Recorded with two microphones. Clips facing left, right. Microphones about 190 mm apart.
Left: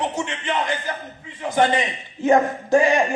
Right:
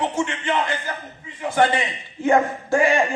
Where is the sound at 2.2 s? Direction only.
20° left (ahead or behind).